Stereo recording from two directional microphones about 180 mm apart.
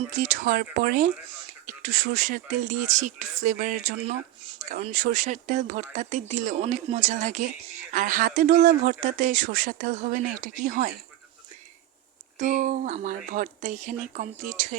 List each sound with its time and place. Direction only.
0.2 s speech: 50° right (ahead or behind)
12.4 s speech: 45° right (ahead or behind)